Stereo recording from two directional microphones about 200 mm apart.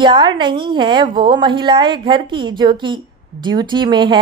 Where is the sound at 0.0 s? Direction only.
25° right (ahead or behind).